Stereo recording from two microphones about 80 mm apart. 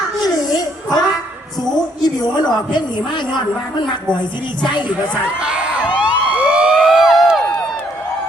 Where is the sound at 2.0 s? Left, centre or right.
Left.